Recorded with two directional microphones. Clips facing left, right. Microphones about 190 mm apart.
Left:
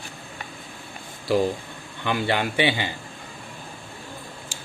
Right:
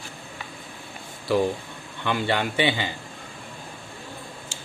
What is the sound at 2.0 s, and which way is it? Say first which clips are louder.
Speech: left 1 dB; 10° left (ahead or behind).